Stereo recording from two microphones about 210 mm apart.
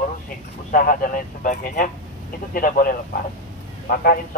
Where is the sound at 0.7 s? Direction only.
40° left (ahead or behind).